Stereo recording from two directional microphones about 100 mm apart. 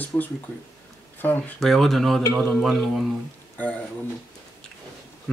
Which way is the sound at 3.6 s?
15° left (ahead or behind).